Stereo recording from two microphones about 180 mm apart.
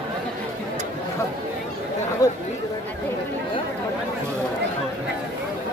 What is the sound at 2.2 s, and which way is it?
Chatter, 20° left (ahead or behind).